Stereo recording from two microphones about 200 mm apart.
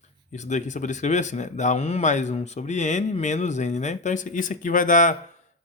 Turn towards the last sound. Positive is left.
turn(degrees=40)  # may be behind; listen again after turning